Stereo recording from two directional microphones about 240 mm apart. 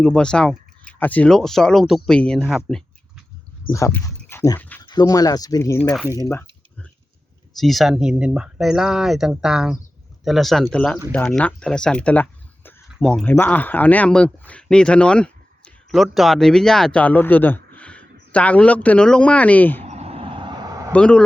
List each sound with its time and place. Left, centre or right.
0.0 s speech: centre
3.7 s speech: centre
5.9 s speech: centre
6.1 s speech: centre
7.5 s speech: centre
19.8 s vehicle: right
20.9 s speech: centre